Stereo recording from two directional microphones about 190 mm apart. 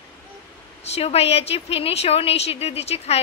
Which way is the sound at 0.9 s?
30° left (ahead or behind).